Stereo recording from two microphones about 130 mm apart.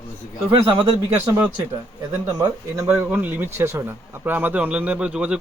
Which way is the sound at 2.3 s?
25° right (ahead or behind).